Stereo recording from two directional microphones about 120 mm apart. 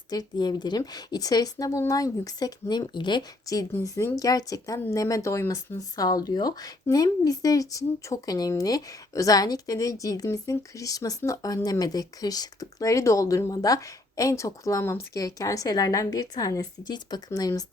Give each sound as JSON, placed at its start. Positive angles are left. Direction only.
{"t": 0.1, "sound": "speech", "side_deg": 35}